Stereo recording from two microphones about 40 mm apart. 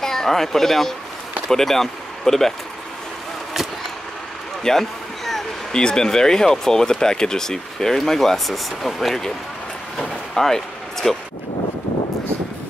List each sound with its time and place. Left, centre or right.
0.0 s speech: centre
4.6 s basketball bounce: centre
5.7 s speech: centre
10.3 s a sound: centre